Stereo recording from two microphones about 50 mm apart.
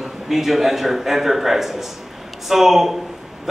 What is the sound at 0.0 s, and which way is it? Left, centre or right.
A man's voice, centre.